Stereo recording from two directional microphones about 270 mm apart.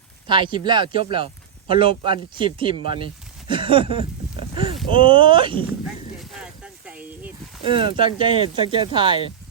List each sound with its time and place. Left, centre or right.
0.3 s speech: centre
5.8 s a sound: centre
7.6 s speech: centre